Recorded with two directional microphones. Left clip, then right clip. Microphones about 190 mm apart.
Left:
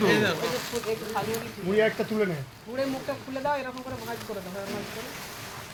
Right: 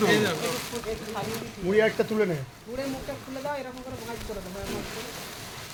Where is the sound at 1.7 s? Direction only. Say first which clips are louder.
Right 1 dB; 40° right (ahead or behind).